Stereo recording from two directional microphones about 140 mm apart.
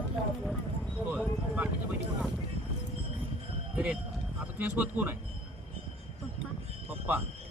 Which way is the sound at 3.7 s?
10° right (ahead or behind).